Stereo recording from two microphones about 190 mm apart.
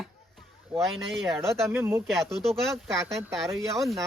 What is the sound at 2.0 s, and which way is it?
Speech, centre (ahead or behind).